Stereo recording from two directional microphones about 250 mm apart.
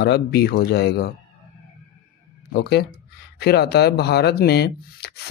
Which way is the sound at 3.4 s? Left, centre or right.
Left.